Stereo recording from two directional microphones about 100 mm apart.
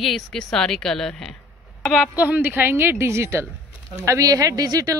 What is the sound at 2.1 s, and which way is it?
A woman's voice, 15° right (ahead or behind).